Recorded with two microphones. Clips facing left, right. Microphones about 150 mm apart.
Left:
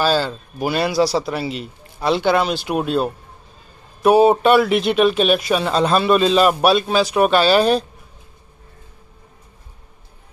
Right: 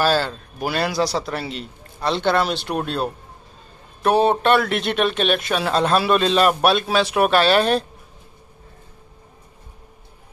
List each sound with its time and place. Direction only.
0.0 s a man's voice: centre (ahead or behind)